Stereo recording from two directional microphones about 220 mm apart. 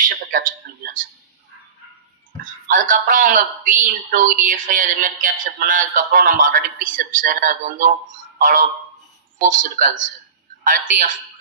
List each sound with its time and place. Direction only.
0.0 s a man's voice: 35° right (ahead or behind)
2.4 s speech: 35° right (ahead or behind)